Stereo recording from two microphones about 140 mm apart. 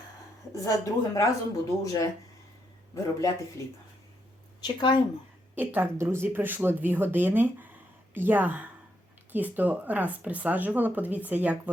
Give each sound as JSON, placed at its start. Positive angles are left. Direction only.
{"t": 0.5, "sound": "a woman's voice", "side_deg": 25}
{"t": 4.6, "sound": "speech", "side_deg": 35}
{"t": 5.5, "sound": "speech", "side_deg": -15}